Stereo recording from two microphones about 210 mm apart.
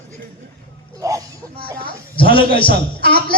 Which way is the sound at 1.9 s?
25° left (ahead or behind).